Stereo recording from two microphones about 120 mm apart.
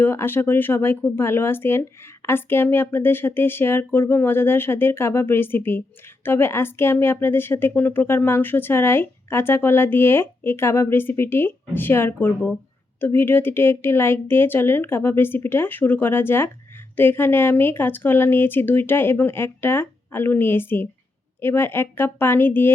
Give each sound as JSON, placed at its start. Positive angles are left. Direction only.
{"t": 0.0, "sound": "speech", "side_deg": 20}